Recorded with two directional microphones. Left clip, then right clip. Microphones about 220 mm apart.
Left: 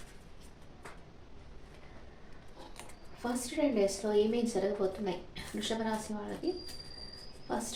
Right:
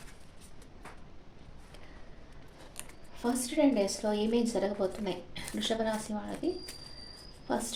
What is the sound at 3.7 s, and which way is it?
A woman's voice, 45° right (ahead or behind).